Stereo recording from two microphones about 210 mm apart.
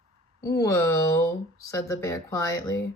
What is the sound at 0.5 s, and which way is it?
Speech, 15° left (ahead or behind).